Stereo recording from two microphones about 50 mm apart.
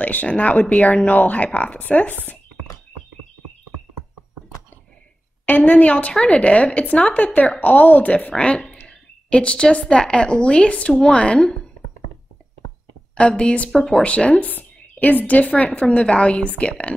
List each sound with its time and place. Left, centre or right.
0.0 s speech: left
5.5 s a woman's voice: left
6.1 s speech: centre
6.4 s a woman's voice: left
13.1 s a woman's voice: left
13.7 s speech: centre
14.0 s a woman's voice: left